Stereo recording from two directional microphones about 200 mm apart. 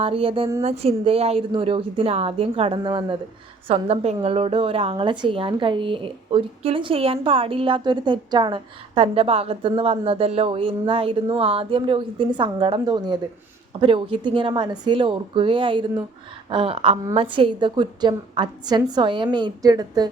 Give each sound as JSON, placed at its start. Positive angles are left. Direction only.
{"t": 0.0, "sound": "a woman's voice", "side_deg": -30}